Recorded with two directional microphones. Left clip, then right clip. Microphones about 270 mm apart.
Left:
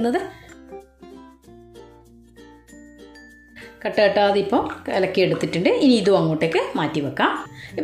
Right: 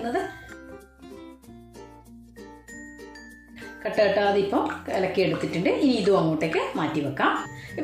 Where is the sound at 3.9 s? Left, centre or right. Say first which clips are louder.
Left 4 dB; left.